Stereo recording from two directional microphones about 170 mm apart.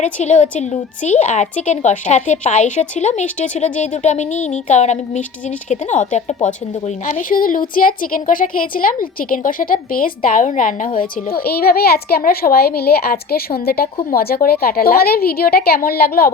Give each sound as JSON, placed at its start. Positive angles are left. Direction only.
{"t": 0.0, "sound": "a woman's voice", "side_deg": 45}
{"t": 11.3, "sound": "a woman's voice", "side_deg": 65}